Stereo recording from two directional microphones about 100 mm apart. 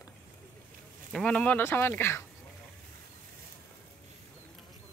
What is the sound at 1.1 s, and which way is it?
Speech, 5° left (ahead or behind).